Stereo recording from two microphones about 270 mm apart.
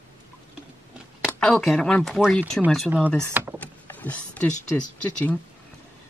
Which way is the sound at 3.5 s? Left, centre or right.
Centre.